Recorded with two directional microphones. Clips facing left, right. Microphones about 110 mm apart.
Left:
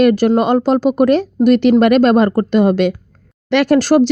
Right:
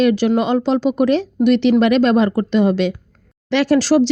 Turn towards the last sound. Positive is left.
turn(degrees=50)  # may be behind; listen again after turning